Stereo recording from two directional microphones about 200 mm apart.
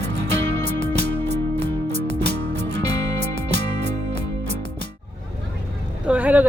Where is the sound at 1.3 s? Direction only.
60° right (ahead or behind).